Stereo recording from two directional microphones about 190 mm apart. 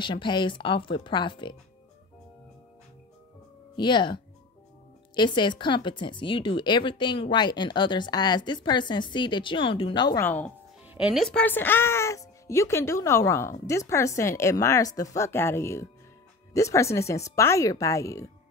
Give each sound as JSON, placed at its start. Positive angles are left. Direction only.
{"t": 0.0, "sound": "speech", "side_deg": 25}
{"t": 3.7, "sound": "speech", "side_deg": 25}
{"t": 10.2, "sound": "speech", "side_deg": 10}
{"t": 10.9, "sound": "a woman's voice", "side_deg": -5}